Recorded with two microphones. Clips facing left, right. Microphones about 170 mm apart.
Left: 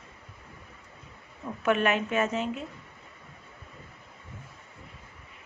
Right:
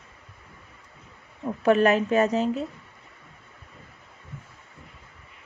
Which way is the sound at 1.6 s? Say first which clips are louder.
Right 6 dB; 35° right (ahead or behind).